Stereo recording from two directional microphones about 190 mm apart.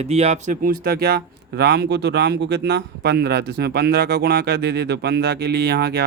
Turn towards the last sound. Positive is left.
turn(degrees=-60)  # may be behind; listen again after turning